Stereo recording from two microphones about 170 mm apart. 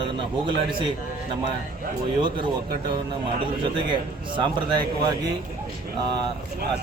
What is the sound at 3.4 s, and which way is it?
A man's voice, 30° right (ahead or behind).